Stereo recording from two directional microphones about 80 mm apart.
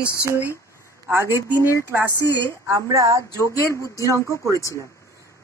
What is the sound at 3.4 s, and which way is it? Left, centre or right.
Speech, left.